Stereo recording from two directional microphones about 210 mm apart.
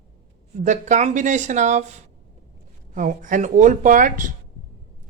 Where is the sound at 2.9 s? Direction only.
40° right (ahead or behind).